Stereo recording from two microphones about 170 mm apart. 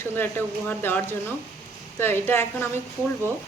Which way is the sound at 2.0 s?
15° left (ahead or behind).